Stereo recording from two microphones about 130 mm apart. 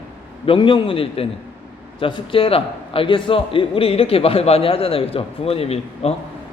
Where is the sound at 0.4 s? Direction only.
40° left (ahead or behind).